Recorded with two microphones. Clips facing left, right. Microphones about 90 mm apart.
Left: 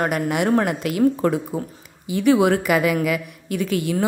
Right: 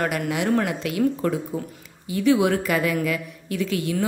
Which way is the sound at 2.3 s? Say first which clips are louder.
Left 4 dB; 60° left (ahead or behind).